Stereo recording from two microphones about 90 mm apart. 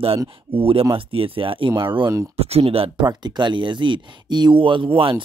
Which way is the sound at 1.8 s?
65° right (ahead or behind).